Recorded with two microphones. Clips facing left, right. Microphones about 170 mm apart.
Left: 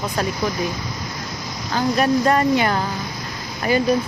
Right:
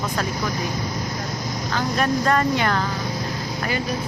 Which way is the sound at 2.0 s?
10° left (ahead or behind).